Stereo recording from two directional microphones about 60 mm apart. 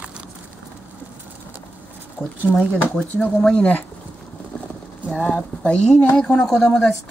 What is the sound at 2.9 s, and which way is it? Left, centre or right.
Speech, left.